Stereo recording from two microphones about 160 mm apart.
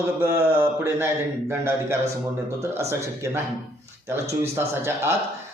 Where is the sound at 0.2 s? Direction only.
20° right (ahead or behind).